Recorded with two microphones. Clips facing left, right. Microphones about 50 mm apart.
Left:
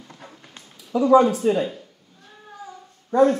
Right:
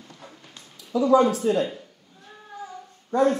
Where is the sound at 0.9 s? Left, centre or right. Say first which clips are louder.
Left 3 dB; left.